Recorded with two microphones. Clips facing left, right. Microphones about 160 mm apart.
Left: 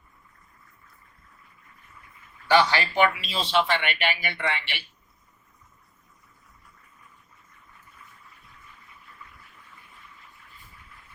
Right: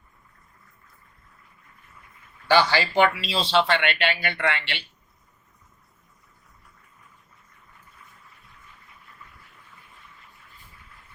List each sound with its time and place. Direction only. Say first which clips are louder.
2.6 s speech: right 2 dB; 90° right
3.5 s speech: right 2 dB; 75° right (ahead or behind)